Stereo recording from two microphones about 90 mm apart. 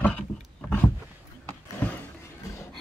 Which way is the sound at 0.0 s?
15° left (ahead or behind).